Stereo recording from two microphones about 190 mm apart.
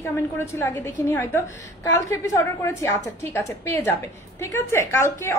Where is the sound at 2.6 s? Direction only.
15° left (ahead or behind).